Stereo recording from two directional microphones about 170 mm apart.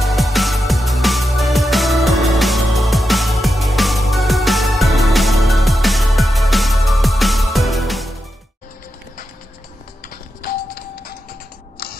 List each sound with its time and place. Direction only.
0.0 s music: centre (ahead or behind)
10.0 s music: 60° left (ahead or behind)